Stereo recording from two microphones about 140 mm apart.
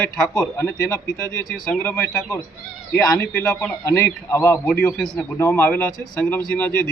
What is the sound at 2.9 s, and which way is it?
A man's voice, 20° left (ahead or behind).